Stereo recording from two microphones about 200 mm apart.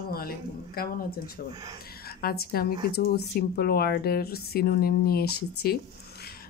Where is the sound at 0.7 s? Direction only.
45° left (ahead or behind).